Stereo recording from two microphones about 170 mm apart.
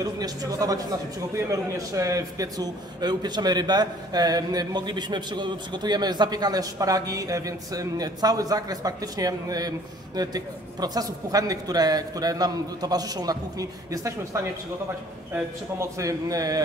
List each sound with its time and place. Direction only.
0.0 s a man's voice: 20° right (ahead or behind)